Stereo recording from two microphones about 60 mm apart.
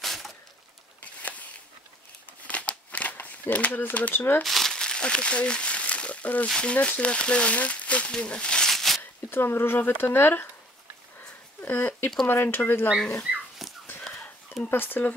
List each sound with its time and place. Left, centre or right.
0.0 s a sound: centre
2.4 s a sound: left
4.4 s crumpling: centre
4.7 s speech: centre
8.1 s a sound: centre
9.3 s speech: left
11.6 s speech: left
13.2 s dog: centre
14.7 s speech: left